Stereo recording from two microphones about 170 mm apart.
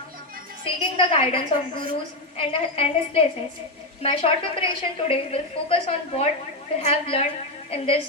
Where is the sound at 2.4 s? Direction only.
35° left (ahead or behind).